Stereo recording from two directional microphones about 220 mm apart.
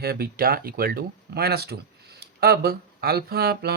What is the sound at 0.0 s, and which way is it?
Speech, 45° right (ahead or behind).